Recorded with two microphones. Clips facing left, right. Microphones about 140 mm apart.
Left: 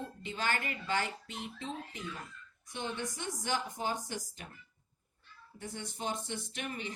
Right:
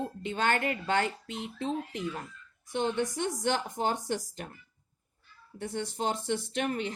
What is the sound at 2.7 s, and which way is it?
Speech, 65° right (ahead or behind).